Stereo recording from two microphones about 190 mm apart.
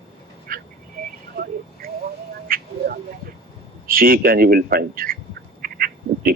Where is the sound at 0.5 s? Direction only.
45° right (ahead or behind).